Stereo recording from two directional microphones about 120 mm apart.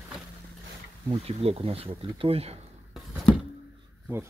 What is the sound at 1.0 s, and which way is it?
Speech, 55° right (ahead or behind).